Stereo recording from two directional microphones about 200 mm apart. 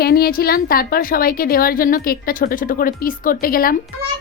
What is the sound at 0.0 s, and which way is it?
A woman's voice, 50° left (ahead or behind).